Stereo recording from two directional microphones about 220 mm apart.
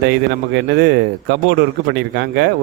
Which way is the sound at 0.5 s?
50° right (ahead or behind).